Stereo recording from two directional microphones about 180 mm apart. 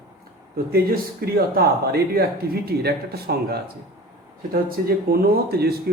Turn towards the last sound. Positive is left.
turn(degrees=-60)  # may be behind; listen again after turning